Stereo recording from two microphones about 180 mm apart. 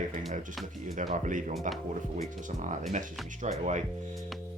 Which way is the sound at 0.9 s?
45° right (ahead or behind).